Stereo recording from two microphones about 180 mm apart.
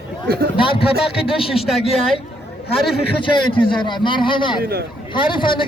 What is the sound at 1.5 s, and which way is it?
Speech, centre (ahead or behind).